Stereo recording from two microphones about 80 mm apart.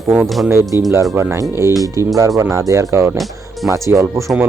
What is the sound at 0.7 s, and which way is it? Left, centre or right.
Speech, right.